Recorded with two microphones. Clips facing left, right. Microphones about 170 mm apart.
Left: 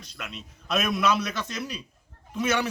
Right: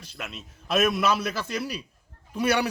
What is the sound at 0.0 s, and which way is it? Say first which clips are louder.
A man's voice: right 1 dB; 5° right (ahead or behind).